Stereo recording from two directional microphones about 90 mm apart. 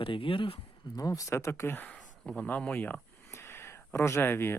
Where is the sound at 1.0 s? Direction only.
40° left (ahead or behind).